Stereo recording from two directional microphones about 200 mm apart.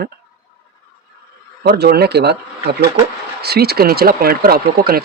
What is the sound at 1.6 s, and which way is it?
Speech, 50° right (ahead or behind).